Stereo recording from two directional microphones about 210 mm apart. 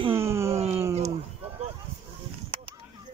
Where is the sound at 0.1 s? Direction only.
10° right (ahead or behind).